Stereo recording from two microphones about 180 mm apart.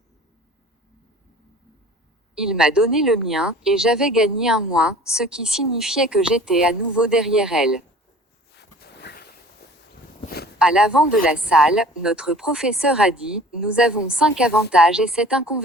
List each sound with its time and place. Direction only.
2.5 s a woman's voice: 5° right (ahead or behind)
8.5 s a sound: 65° left (ahead or behind)
10.6 s a woman's voice: 5° right (ahead or behind)